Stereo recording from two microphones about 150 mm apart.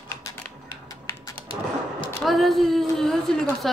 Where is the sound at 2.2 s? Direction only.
Centre (ahead or behind).